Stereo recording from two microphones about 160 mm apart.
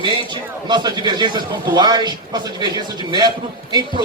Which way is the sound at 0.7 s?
25° right (ahead or behind).